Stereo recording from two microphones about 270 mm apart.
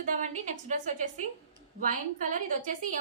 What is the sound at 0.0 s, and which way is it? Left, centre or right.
A woman's voice, right.